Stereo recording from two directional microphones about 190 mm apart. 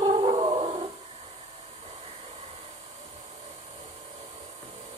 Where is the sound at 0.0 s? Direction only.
30° right (ahead or behind).